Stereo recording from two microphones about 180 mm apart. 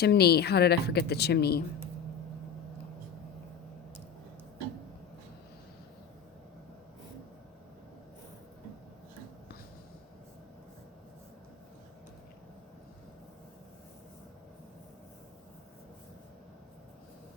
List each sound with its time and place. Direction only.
0.0 s speech: 65° left (ahead or behind)